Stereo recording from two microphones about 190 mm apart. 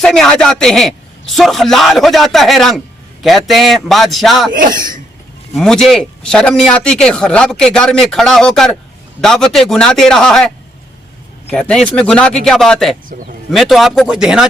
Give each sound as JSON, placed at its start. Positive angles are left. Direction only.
{"t": 0.0, "sound": "speech", "side_deg": 5}
{"t": 4.5, "sound": "speech", "side_deg": -45}
{"t": 5.5, "sound": "speech", "side_deg": 5}
{"t": 11.5, "sound": "speech", "side_deg": 5}